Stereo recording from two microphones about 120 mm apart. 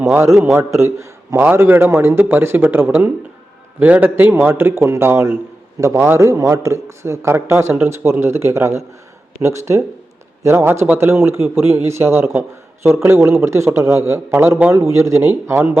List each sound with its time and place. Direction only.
0.0 s a man's voice: 25° right (ahead or behind)